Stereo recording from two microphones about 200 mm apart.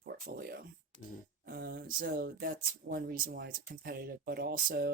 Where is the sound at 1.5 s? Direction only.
50° right (ahead or behind).